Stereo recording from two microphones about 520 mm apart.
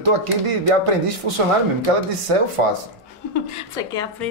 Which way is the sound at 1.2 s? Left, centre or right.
Right.